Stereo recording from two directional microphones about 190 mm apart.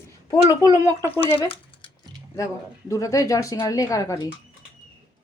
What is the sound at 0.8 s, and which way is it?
Speech, 15° left (ahead or behind).